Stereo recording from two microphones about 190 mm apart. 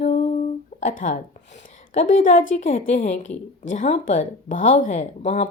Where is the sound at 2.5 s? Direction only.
40° left (ahead or behind).